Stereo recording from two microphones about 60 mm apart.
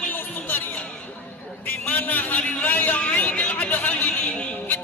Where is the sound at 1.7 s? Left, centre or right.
Left.